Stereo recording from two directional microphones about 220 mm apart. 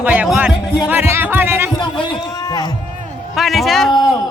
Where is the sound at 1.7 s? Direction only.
20° left (ahead or behind).